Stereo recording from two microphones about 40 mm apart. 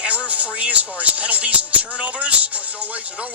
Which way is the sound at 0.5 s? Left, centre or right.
Right.